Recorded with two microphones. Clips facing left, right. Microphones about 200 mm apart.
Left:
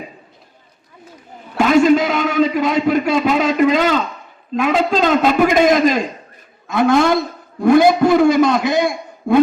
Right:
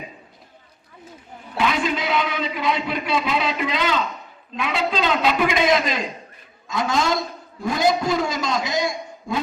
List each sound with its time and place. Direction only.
1.5 s a man's voice: 45° left (ahead or behind)
6.7 s a man's voice: 60° left (ahead or behind)